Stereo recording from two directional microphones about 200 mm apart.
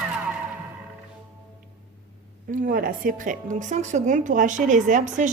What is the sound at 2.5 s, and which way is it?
Speech, 45° right (ahead or behind).